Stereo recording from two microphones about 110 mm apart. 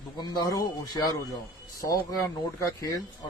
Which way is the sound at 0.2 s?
40° left (ahead or behind).